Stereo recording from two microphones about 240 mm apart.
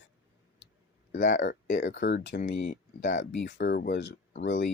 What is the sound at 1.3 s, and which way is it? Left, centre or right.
Speech, left.